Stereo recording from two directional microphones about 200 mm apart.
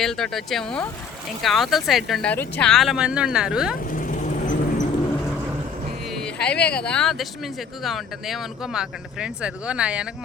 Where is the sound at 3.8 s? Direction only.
40° left (ahead or behind).